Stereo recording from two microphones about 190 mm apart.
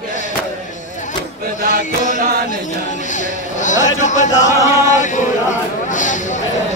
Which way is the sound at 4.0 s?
40° left (ahead or behind).